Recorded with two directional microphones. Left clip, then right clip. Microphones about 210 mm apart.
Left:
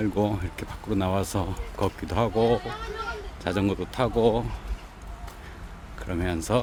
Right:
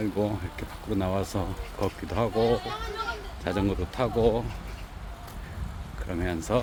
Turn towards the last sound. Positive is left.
turn(degrees=10)  # may be behind; listen again after turning